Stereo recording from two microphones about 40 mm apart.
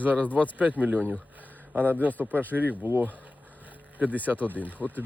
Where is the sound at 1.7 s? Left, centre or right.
Right.